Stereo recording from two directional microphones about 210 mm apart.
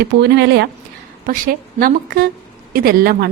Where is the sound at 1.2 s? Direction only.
45° right (ahead or behind).